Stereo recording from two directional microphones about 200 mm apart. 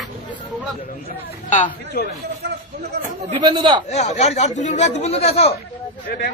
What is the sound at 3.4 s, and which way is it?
Speech, 25° right (ahead or behind).